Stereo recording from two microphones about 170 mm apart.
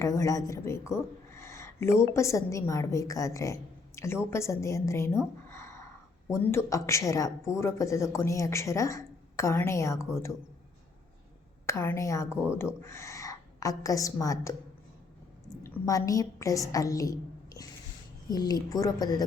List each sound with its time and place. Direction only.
0.0 s speech: 20° left (ahead or behind)
11.6 s a woman's voice: 15° left (ahead or behind)
15.6 s a woman's voice: 20° left (ahead or behind)